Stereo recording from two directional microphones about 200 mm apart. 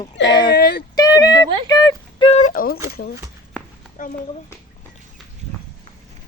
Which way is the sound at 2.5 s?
45° left (ahead or behind).